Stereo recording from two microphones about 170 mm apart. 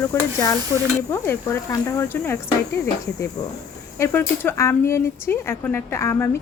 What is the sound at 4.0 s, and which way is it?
Speech, 10° left (ahead or behind).